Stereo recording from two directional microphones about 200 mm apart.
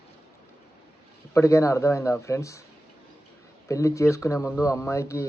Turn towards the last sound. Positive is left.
turn(degrees=15)  # may be behind; listen again after turning